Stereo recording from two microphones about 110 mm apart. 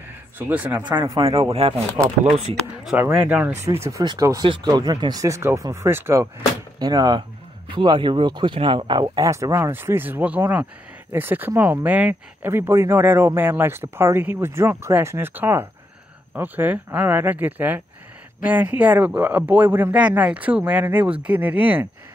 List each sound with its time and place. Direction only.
0.4 s speech: 15° right (ahead or behind)
1.5 s speech: 65° right (ahead or behind)
3.0 s speech: 10° right (ahead or behind)
3.5 s speech: 25° right (ahead or behind)
6.8 s speech: 35° right (ahead or behind)
9.3 s speech: 30° right (ahead or behind)